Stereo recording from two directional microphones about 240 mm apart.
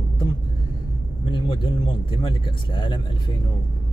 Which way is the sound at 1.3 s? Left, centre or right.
Centre.